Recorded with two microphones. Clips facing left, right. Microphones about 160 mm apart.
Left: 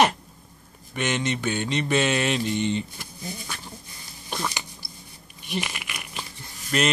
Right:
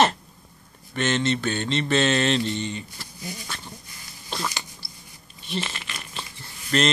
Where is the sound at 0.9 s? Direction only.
15° left (ahead or behind).